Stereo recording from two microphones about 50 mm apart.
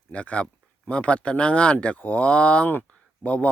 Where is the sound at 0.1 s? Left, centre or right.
Left.